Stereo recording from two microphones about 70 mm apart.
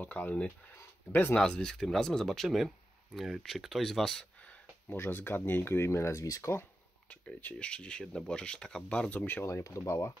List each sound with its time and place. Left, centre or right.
0.0 s speech: left
1.3 s speech: centre
4.4 s a sound: centre
4.9 s speech: left
7.1 s speech: left
9.2 s speech: left
9.5 s speech: left